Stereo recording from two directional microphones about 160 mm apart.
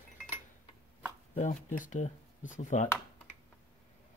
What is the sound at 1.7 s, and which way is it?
Speech, 55° left (ahead or behind).